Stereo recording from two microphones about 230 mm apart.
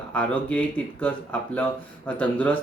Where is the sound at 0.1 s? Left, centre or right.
Centre.